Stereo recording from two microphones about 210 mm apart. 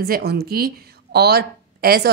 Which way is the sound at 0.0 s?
50° right (ahead or behind).